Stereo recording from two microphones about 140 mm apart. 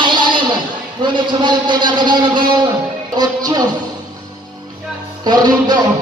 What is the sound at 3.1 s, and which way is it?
Speech, 30° right (ahead or behind).